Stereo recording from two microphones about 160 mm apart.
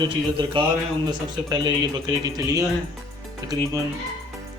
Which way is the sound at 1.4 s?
25° right (ahead or behind).